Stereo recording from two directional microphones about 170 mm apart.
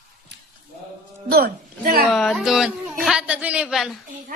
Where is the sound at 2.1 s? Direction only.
Centre (ahead or behind).